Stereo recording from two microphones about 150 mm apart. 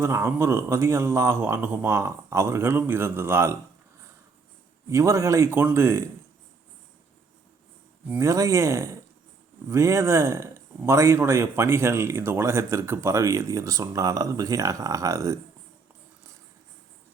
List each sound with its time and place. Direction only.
0.0 s speech: 20° right (ahead or behind)
4.9 s speech: 20° right (ahead or behind)
8.2 s speech: 20° right (ahead or behind)